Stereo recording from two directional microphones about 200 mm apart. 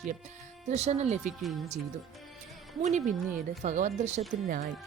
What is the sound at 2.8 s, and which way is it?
A woman's voice, 35° right (ahead or behind).